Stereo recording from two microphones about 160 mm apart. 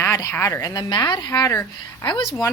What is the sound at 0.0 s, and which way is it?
A woman's voice, 15° left (ahead or behind).